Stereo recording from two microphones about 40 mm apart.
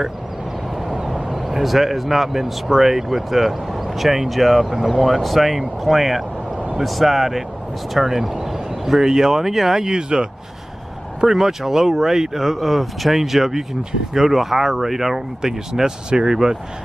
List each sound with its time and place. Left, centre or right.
1.3 s speech: centre
6.5 s a sound: right
6.8 s speech: centre
11.3 s speech: centre